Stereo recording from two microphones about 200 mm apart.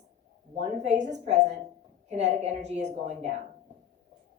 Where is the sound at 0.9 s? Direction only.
35° right (ahead or behind).